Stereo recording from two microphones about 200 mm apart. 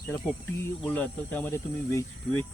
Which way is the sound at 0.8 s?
5° left (ahead or behind).